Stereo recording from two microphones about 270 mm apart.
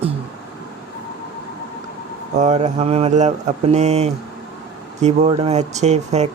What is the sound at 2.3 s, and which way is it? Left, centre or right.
Speech, right.